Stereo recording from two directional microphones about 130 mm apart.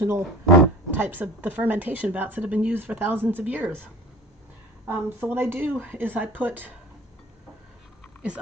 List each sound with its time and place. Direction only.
0.0 s speech: 20° right (ahead or behind)
4.9 s speech: 15° right (ahead or behind)